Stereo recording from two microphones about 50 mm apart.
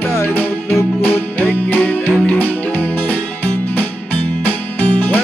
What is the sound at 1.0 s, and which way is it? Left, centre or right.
Music, left.